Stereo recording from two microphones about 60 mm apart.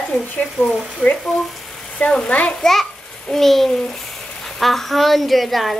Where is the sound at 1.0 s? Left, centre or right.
Left.